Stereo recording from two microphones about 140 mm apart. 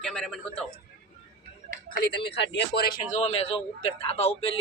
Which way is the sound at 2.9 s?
55° left (ahead or behind).